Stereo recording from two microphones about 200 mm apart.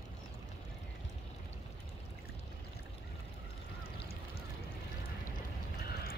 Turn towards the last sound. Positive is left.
turn(degrees=50)  # may be behind; listen again after turning